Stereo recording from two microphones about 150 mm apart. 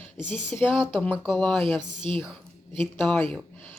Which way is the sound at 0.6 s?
Centre (ahead or behind).